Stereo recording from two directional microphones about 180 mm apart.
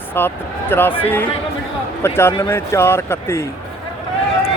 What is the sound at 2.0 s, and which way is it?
Speech, 15° left (ahead or behind).